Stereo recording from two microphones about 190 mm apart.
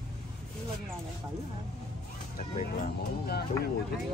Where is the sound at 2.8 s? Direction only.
55° left (ahead or behind).